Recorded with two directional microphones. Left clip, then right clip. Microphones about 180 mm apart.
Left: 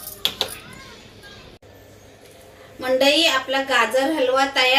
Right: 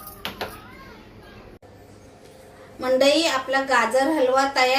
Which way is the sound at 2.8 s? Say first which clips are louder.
Left 1 dB; 15° right (ahead or behind).